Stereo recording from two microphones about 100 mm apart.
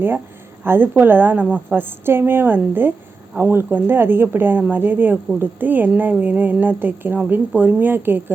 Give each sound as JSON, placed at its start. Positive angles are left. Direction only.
{"t": 0.6, "sound": "a woman's voice", "side_deg": -20}